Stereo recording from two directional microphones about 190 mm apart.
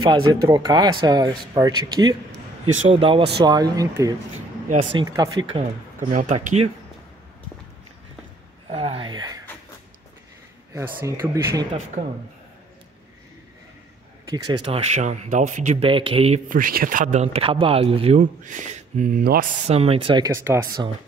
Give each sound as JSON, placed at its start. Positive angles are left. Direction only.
{"t": 0.0, "sound": "speech", "side_deg": -20}
{"t": 5.9, "sound": "speech", "side_deg": -40}
{"t": 8.6, "sound": "a sound", "side_deg": -30}
{"t": 10.7, "sound": "speech", "side_deg": -15}
{"t": 14.3, "sound": "speech", "side_deg": -20}
{"t": 16.4, "sound": "speech", "side_deg": -45}
{"t": 20.3, "sound": "speech", "side_deg": -15}